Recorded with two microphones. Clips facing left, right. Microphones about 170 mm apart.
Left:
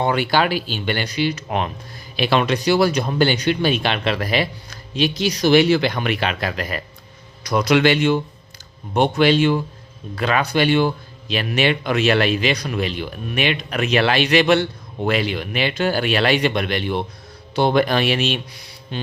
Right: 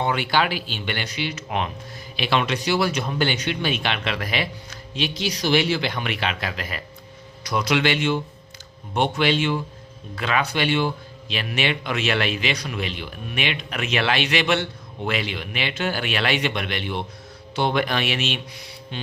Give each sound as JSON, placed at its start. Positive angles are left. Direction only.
{"t": 0.0, "sound": "a man's voice", "side_deg": 40}